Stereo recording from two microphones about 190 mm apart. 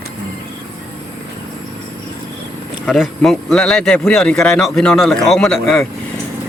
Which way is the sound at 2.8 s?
Centre (ahead or behind).